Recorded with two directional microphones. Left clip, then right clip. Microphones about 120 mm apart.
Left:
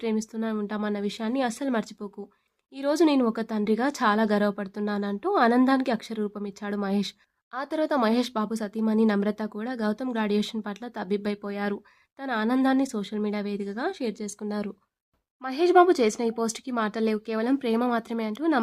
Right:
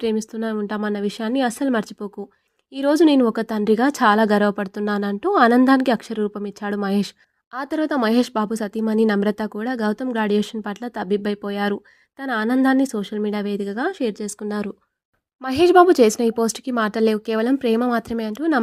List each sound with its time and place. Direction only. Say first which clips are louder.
0.0 s a woman's voice: right 6 dB; 45° right (ahead or behind)
1.3 s speech: right 7 dB; 25° right (ahead or behind)
2.7 s a woman's voice: right 7 dB; 45° right (ahead or behind)